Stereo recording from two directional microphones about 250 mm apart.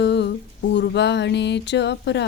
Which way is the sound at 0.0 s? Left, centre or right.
Left.